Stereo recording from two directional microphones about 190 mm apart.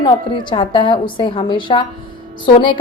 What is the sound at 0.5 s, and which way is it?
A woman's voice, 25° left (ahead or behind).